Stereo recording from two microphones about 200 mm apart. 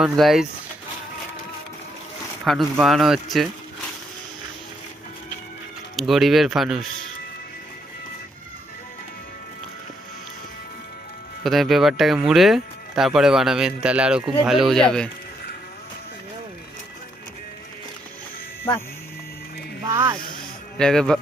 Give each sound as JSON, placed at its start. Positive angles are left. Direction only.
{"t": 0.0, "sound": "speech", "side_deg": 0}
{"t": 2.4, "sound": "speech", "side_deg": 0}
{"t": 6.0, "sound": "speech", "side_deg": 0}
{"t": 11.4, "sound": "speech", "side_deg": 0}
{"t": 19.9, "sound": "speech", "side_deg": -15}
{"t": 20.7, "sound": "speech", "side_deg": 5}